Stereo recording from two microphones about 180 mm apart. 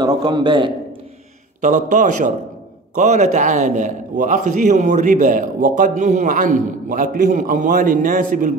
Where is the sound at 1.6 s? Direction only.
45° right (ahead or behind).